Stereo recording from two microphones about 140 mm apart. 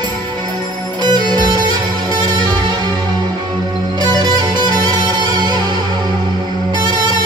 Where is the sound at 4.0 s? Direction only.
30° right (ahead or behind).